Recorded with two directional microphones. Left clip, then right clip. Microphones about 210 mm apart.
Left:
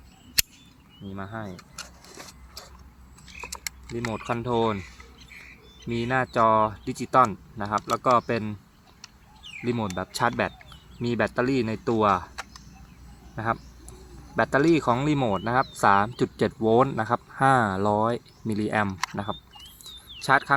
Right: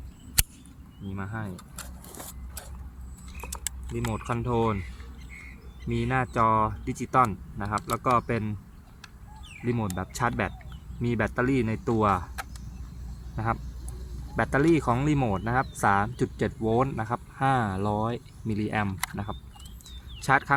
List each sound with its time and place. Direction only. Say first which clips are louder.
1.1 s speech: left 1 dB; 35° left (ahead or behind)
1.5 s vehicle: left 3 dB; centre (ahead or behind)
4.1 s speech: left 3 dB; 35° left (ahead or behind)
5.9 s speech: left 3 dB; 40° left (ahead or behind)
9.6 s speech: left 2 dB; 40° left (ahead or behind)
13.3 s speech: left 2 dB; 35° left (ahead or behind)